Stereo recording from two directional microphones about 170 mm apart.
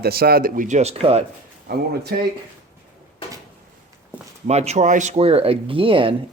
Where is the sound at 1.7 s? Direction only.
70° right (ahead or behind).